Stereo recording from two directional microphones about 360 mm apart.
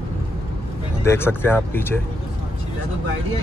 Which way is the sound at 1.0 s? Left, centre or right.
Centre.